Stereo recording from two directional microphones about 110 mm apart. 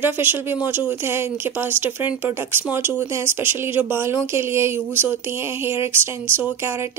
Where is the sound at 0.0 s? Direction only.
20° right (ahead or behind).